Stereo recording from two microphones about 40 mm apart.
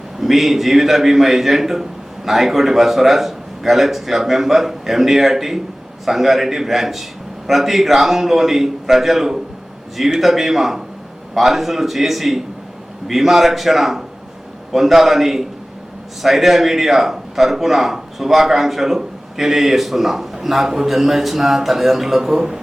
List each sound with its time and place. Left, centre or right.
0.2 s a man's voice: centre